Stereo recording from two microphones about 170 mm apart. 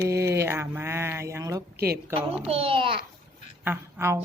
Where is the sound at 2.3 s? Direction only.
35° right (ahead or behind).